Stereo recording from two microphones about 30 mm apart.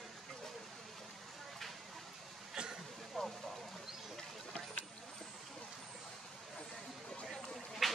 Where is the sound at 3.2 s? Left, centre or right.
Centre.